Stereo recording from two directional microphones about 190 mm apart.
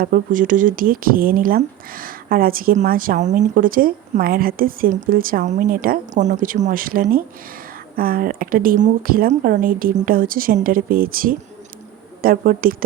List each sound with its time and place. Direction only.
0.0 s speech: 45° right (ahead or behind)